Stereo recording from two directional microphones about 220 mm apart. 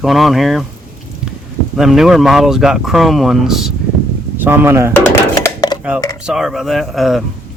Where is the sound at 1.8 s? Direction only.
Centre (ahead or behind).